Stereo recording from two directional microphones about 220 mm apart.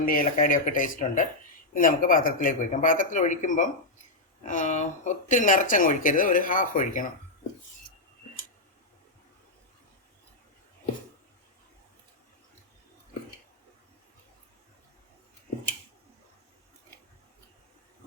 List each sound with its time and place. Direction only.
0.0 s speech: 40° left (ahead or behind)